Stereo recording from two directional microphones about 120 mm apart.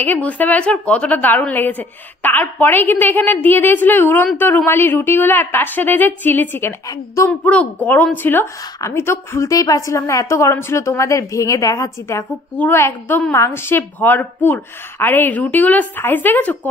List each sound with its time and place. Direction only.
0.0 s a woman's voice: 15° left (ahead or behind)